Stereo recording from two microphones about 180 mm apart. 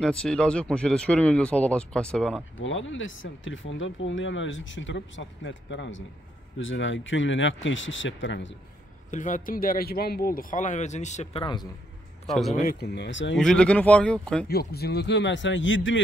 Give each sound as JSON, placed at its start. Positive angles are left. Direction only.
{"t": 0.0, "sound": "speech", "side_deg": 5}
{"t": 2.5, "sound": "speech", "side_deg": 90}
{"t": 9.1, "sound": "speech", "side_deg": 45}
{"t": 12.3, "sound": "speech", "side_deg": 0}
{"t": 12.5, "sound": "a man's voice", "side_deg": 60}
{"t": 13.4, "sound": "speech", "side_deg": 5}
{"t": 14.5, "sound": "a man's voice", "side_deg": 60}